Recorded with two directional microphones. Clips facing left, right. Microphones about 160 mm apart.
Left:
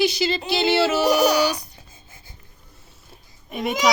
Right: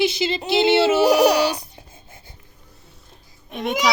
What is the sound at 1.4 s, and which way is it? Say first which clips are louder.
Speech: right 1 dB; 25° right (ahead or behind).